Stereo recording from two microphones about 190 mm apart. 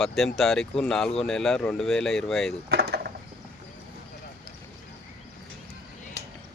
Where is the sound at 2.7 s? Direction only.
60° right (ahead or behind).